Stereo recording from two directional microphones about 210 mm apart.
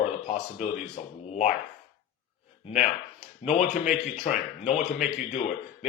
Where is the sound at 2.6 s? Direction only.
35° left (ahead or behind).